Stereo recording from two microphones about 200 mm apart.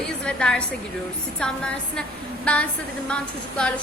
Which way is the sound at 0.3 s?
5° left (ahead or behind).